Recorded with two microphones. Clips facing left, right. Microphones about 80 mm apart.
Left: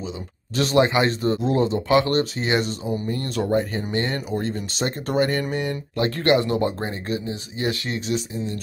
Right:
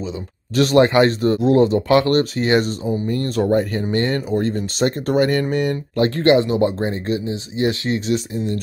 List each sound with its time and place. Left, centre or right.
0.6 s speech: right
3.4 s speech: right
3.9 s speech: right
5.9 s speech: right